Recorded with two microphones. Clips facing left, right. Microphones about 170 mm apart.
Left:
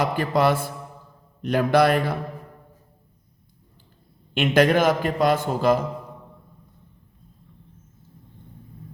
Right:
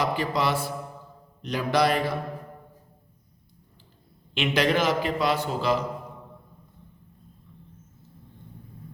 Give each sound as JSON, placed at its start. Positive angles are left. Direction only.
{"t": 0.0, "sound": "a man's voice", "side_deg": 50}
{"t": 4.4, "sound": "a man's voice", "side_deg": 50}